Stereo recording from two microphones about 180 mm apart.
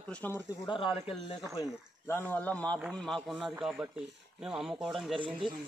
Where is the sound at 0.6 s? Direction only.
30° left (ahead or behind).